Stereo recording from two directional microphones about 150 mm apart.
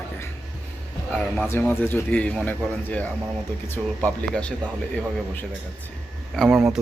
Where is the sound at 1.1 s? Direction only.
10° left (ahead or behind).